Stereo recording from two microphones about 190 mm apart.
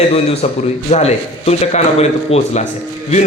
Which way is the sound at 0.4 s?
35° left (ahead or behind).